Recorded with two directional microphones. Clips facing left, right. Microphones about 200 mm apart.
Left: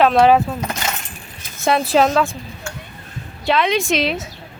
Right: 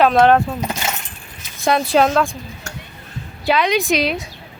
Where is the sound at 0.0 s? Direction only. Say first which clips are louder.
Even; centre (ahead or behind).